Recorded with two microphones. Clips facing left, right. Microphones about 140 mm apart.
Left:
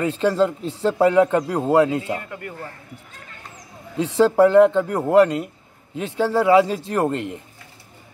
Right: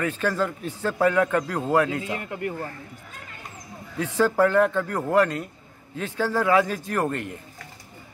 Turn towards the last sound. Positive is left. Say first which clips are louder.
# left 4 dB
turn(degrees=20)  # may be behind; listen again after turning